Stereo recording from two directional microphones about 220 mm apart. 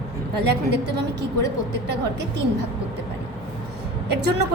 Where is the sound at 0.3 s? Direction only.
50° right (ahead or behind).